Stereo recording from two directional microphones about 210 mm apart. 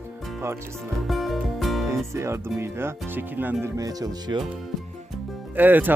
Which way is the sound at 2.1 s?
10° right (ahead or behind).